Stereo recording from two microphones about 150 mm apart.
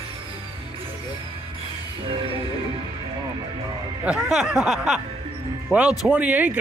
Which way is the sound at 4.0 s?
5° right (ahead or behind).